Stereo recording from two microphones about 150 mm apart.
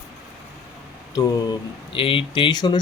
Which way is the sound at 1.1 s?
30° left (ahead or behind).